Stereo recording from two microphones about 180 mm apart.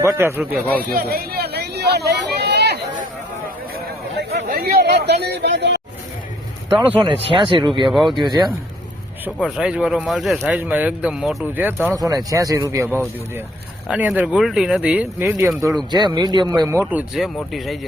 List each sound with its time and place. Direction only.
0.0 s speech: 15° right (ahead or behind)
0.5 s speech: 10° left (ahead or behind)
0.9 s a sound: 60° right (ahead or behind)
4.2 s chatter: 65° right (ahead or behind)
4.8 s speech: 65° right (ahead or behind)
6.7 s speech: 10° right (ahead or behind)
7.0 s speech: 30° right (ahead or behind)
7.9 s speech: centre (ahead or behind)
8.2 s speech: 25° right (ahead or behind)
9.2 s speech: 5° right (ahead or behind)
13.8 s speech: 5° right (ahead or behind)
15.9 s speech: 25° right (ahead or behind)
16.8 s speech: 5° right (ahead or behind)